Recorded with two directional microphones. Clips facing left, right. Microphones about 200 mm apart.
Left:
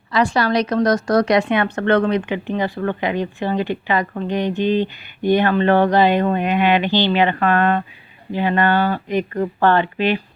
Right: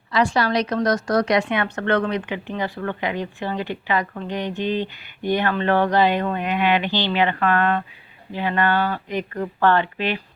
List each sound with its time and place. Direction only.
0.1 s a woman's voice: 45° left (ahead or behind); by 10.2 s 20° left (ahead or behind)